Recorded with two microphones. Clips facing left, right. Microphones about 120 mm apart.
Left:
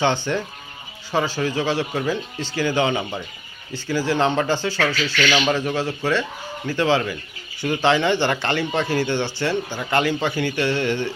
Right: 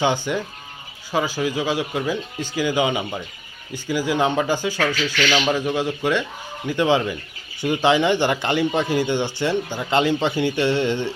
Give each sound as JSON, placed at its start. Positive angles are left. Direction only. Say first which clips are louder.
{"t": 0.3, "sound": "speech", "louder": "even", "side_deg": -10}
{"t": 5.2, "sound": "speech", "louder": "left 1 dB", "side_deg": 10}
{"t": 5.5, "sound": "speech", "louder": "right 1 dB", "side_deg": -10}